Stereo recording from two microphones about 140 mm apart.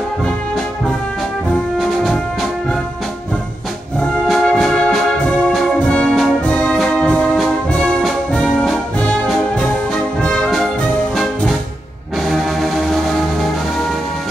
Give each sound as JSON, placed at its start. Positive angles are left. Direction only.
{"t": 4.3, "sound": "music", "side_deg": 0}
{"t": 5.5, "sound": "brass instrument", "side_deg": 5}
{"t": 10.2, "sound": "music", "side_deg": 5}
{"t": 12.3, "sound": "music", "side_deg": 0}